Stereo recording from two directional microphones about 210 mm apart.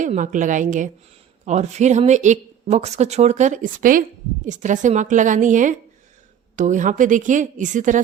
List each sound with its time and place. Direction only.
0.0 s speech: 35° right (ahead or behind)